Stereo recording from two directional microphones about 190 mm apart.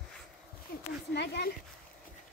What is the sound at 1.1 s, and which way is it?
Speech, 60° left (ahead or behind).